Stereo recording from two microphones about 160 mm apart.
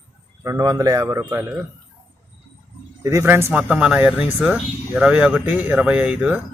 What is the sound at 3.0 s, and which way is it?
Speech, 15° right (ahead or behind).